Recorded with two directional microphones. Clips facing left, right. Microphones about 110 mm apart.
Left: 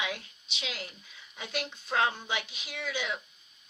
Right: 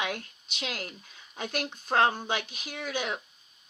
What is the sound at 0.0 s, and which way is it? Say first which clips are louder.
A woman's voice: right 3 dB; 50° right (ahead or behind).